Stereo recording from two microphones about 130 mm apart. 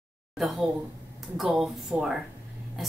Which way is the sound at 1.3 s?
Centre (ahead or behind).